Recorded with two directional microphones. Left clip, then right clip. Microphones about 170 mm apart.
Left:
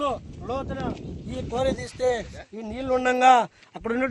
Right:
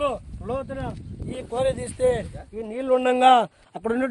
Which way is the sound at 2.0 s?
60° right (ahead or behind).